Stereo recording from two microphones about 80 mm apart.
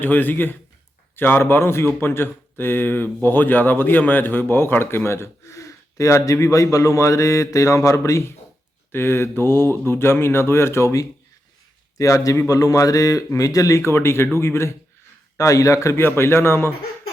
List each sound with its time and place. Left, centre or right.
0.0 s a man's voice: left
11.9 s a man's voice: left